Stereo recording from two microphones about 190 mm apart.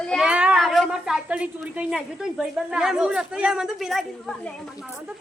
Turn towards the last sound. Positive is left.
turn(degrees=0)  # may be behind; listen again after turning